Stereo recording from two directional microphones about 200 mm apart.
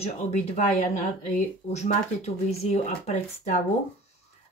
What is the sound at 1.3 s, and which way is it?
Speech, 35° left (ahead or behind).